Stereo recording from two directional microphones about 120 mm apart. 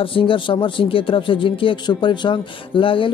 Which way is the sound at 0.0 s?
50° left (ahead or behind).